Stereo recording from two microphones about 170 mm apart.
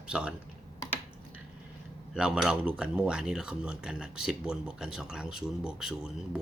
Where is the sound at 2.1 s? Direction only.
5° right (ahead or behind).